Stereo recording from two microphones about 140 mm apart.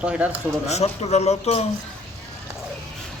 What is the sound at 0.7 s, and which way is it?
Speech, 50° left (ahead or behind).